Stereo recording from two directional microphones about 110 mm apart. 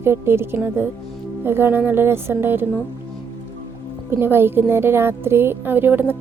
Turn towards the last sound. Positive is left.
turn(degrees=-20)  # may be behind; listen again after turning